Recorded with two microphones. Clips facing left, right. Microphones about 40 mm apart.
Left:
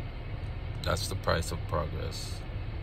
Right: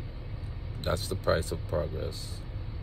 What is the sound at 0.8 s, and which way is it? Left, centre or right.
Speech, left.